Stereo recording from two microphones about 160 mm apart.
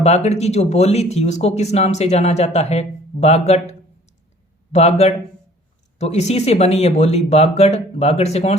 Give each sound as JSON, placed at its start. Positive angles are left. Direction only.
{"t": 0.0, "sound": "speech", "side_deg": 40}